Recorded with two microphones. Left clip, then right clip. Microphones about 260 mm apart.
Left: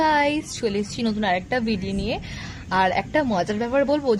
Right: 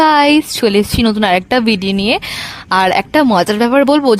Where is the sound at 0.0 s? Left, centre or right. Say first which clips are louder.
Right 11 dB; right.